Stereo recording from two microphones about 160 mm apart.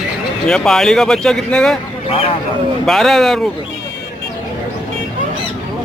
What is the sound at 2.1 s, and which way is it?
Speech, 35° left (ahead or behind).